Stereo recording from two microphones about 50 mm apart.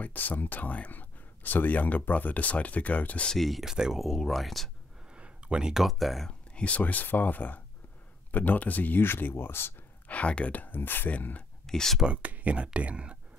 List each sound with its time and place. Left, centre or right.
0.0 s speech: left
3.3 s speech: centre
3.7 s speech: centre
4.0 s speech: centre
5.1 s speech: centre
6.2 s speech: left
9.0 s speech: left
10.0 s speech: left
11.1 s speech: left
11.6 s speech: centre
12.0 s speech: right